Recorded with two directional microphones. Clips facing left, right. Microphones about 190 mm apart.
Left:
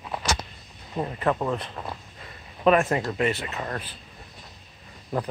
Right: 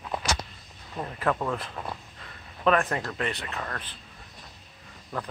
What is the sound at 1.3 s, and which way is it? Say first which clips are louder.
Speech: left 2 dB; 15° left (ahead or behind).